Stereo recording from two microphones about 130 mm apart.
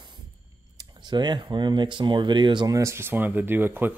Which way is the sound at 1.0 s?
35° right (ahead or behind).